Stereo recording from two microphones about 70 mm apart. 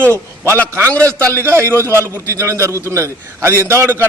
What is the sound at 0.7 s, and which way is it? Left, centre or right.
A man's voice, right.